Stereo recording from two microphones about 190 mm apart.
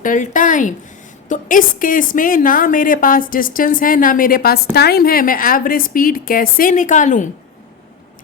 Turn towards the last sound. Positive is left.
turn(degrees=40)  # may be behind; listen again after turning